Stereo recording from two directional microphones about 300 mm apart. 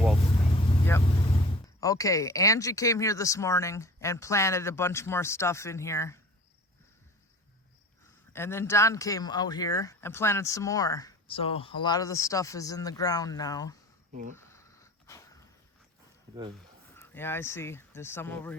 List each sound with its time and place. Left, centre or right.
0.3 s vehicle: centre
0.9 s vehicle: centre
1.8 s speech: centre
8.3 s speech: centre
14.1 s speech: right
14.3 s a sound: centre
16.9 s speech: centre